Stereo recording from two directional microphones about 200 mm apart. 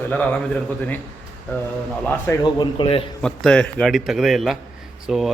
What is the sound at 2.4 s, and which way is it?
Speech, 25° left (ahead or behind).